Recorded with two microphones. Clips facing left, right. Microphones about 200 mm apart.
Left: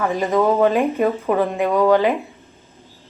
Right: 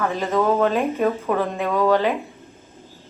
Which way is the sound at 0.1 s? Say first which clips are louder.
Left 3 dB; 15° left (ahead or behind).